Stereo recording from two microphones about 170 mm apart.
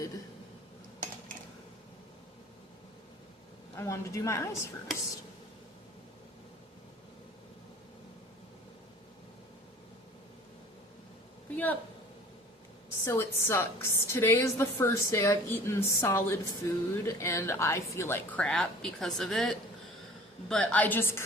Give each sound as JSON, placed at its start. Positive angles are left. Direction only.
{"t": 3.8, "sound": "speech", "side_deg": 15}
{"t": 11.5, "sound": "speech", "side_deg": 10}
{"t": 13.1, "sound": "speech", "side_deg": 15}